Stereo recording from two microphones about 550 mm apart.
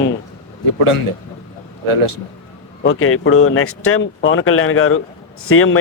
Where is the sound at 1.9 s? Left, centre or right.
Right.